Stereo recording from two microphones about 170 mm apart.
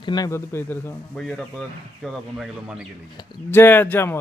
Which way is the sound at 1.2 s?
Centre (ahead or behind).